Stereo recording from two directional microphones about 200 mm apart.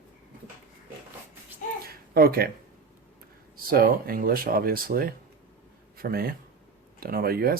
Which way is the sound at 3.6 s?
45° right (ahead or behind).